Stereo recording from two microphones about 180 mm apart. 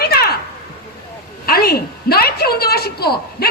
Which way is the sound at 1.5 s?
60° left (ahead or behind).